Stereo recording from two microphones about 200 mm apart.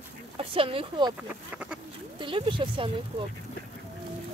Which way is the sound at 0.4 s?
25° right (ahead or behind).